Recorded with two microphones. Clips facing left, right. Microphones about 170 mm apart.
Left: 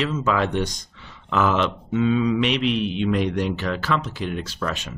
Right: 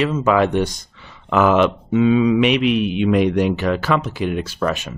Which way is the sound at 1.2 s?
60° right (ahead or behind).